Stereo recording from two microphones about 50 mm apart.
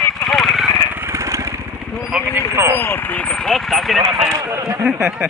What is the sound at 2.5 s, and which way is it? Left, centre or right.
Speech, right.